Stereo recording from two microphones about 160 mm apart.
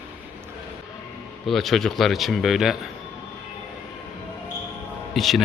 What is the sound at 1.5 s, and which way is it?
Speech, centre (ahead or behind).